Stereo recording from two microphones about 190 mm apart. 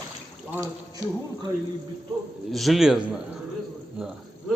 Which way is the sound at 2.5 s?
Centre (ahead or behind).